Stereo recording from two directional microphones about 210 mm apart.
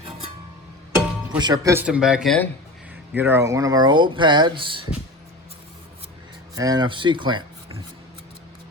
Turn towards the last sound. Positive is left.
turn(degrees=-20)  # may be behind; listen again after turning